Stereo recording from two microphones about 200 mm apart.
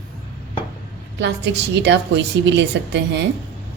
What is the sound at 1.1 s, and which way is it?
A woman's voice, 60° right (ahead or behind).